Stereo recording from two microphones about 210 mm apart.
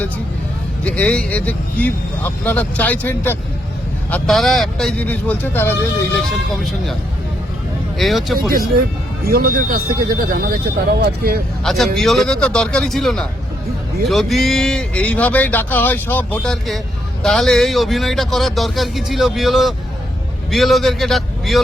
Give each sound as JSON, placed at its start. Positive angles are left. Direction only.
{"t": 0.9, "sound": "speech", "side_deg": 5}
{"t": 7.9, "sound": "speech", "side_deg": 0}
{"t": 8.4, "sound": "speech", "side_deg": -45}
{"t": 11.6, "sound": "a man's voice", "side_deg": 0}